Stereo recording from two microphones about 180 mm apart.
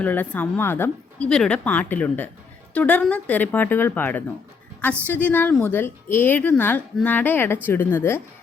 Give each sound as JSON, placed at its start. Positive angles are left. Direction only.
{"t": 0.0, "sound": "a woman's voice", "side_deg": 10}